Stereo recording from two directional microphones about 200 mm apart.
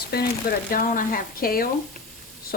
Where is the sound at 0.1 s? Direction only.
50° left (ahead or behind).